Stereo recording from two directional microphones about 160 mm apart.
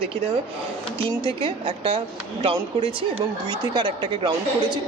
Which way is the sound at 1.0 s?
35° right (ahead or behind).